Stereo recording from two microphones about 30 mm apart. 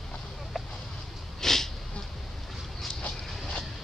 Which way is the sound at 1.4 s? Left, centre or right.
Centre.